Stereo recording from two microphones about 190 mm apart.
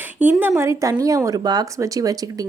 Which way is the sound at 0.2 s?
10° right (ahead or behind).